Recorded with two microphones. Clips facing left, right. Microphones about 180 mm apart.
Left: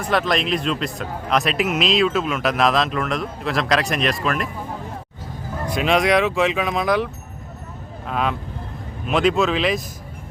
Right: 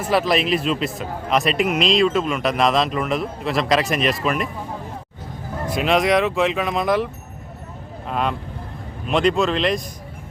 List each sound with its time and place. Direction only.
0.0 s a man's voice: 5° right (ahead or behind)
5.6 s a man's voice: centre (ahead or behind)